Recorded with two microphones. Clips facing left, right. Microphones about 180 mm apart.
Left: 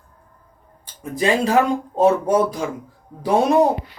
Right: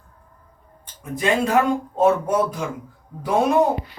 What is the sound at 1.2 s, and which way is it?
Speech, 30° left (ahead or behind).